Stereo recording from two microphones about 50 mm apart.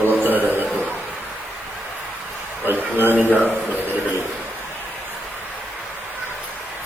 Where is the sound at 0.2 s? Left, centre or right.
Right.